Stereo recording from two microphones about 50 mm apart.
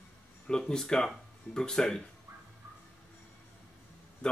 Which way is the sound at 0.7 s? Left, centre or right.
Centre.